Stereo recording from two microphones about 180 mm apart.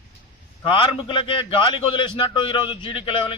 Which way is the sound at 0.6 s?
25° left (ahead or behind).